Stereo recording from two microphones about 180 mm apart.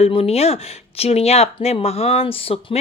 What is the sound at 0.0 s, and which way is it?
Speech, 35° left (ahead or behind).